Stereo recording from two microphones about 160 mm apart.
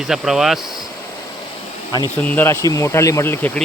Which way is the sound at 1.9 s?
20° left (ahead or behind).